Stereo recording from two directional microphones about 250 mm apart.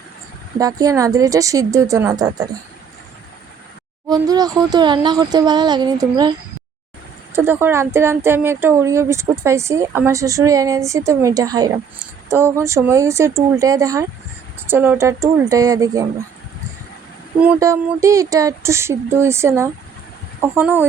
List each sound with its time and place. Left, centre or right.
0.6 s a woman's voice: centre
4.1 s a woman's voice: centre
7.3 s a woman's voice: centre
17.4 s a woman's voice: centre